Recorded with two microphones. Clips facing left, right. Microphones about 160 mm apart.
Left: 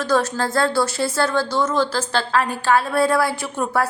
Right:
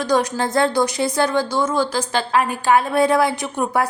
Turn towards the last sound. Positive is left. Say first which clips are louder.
# right 1 dB
turn(degrees=-15)  # may be behind; listen again after turning